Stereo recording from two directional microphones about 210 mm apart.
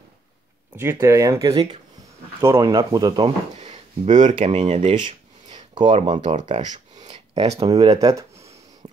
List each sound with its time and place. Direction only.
0.7 s speech: 10° right (ahead or behind)
3.5 s speech: 35° right (ahead or behind)